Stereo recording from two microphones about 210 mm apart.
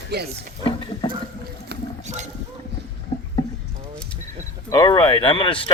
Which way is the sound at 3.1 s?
25° left (ahead or behind).